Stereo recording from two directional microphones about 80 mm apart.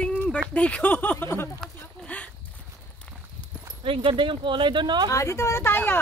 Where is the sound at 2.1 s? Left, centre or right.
Centre.